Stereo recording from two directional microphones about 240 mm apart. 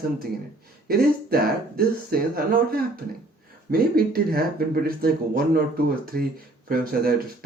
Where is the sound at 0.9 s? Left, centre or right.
Right.